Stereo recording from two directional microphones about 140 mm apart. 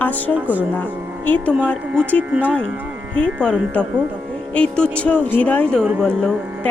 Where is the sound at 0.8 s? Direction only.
10° left (ahead or behind).